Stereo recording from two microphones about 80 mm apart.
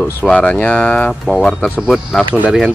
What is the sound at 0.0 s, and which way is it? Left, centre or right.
Speech, centre.